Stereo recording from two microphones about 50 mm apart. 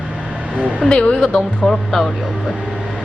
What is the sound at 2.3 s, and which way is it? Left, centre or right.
Speech, centre.